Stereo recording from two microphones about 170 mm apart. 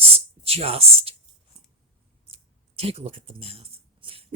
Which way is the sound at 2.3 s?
35° right (ahead or behind).